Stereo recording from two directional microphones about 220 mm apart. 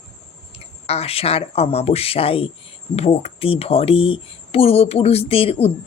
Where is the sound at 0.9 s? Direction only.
25° left (ahead or behind).